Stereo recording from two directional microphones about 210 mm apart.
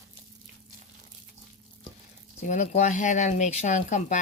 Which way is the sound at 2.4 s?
35° left (ahead or behind).